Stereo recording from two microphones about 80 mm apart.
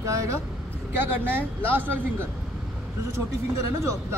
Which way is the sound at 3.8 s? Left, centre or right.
Right.